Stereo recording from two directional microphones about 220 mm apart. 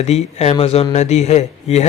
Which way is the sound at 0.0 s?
30° left (ahead or behind).